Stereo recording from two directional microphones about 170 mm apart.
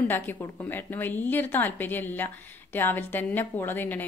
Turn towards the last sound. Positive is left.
turn(degrees=10)  # may be behind; listen again after turning